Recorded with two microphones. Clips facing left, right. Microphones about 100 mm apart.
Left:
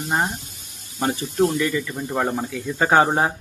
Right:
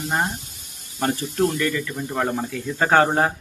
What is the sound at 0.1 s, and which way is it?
Speech, 5° left (ahead or behind).